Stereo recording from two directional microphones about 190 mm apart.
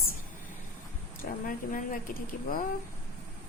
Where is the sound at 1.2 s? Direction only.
45° left (ahead or behind).